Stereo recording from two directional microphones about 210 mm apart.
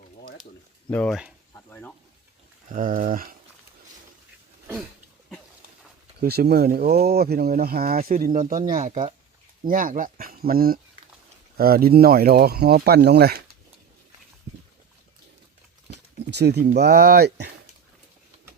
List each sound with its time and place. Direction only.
0.9 s speech: 5° left (ahead or behind)
1.5 s sizzle: 5° left (ahead or behind)
2.6 s speech: 40° right (ahead or behind)
6.1 s speech: 50° right (ahead or behind); by 9.1 s 30° right (ahead or behind)
9.6 s speech: 40° right (ahead or behind)
15.9 s speech: 55° right (ahead or behind)